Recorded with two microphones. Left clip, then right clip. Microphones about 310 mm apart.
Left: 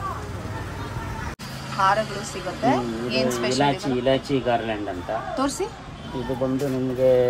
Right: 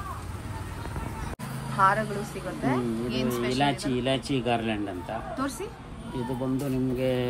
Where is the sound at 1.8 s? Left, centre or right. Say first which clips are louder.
Left 2 dB; centre.